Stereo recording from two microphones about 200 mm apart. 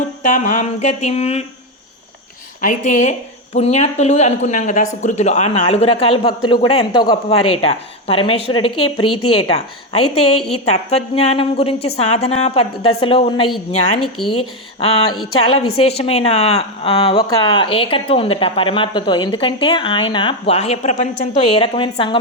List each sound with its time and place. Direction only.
0.2 s speech: 40° left (ahead or behind)
2.6 s speech: 40° left (ahead or behind)
14.0 s speech: centre (ahead or behind)
14.3 s speech: 30° left (ahead or behind)